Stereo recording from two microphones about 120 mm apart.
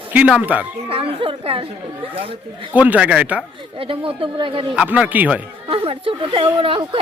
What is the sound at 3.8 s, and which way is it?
Speech, 45° right (ahead or behind).